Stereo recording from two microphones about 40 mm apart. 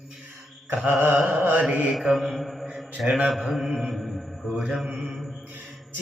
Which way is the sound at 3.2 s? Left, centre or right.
Centre.